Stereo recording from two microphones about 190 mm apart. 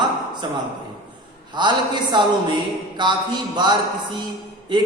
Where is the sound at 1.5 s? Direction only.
25° right (ahead or behind).